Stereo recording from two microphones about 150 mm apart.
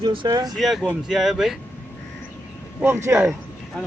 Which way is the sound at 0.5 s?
Centre (ahead or behind).